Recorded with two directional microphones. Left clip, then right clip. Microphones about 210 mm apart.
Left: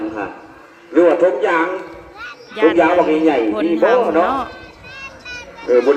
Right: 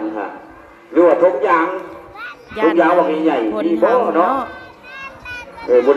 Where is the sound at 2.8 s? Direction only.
55° left (ahead or behind).